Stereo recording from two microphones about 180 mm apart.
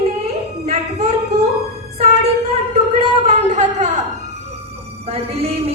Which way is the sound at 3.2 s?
40° right (ahead or behind).